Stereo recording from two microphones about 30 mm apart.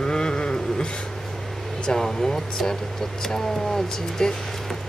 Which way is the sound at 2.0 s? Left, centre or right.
Centre.